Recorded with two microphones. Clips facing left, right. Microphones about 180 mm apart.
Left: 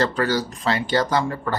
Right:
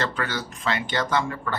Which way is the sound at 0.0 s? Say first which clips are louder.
Left 7 dB; 35° left (ahead or behind).